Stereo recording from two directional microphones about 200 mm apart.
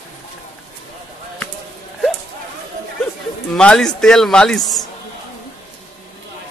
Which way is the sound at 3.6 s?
5° left (ahead or behind).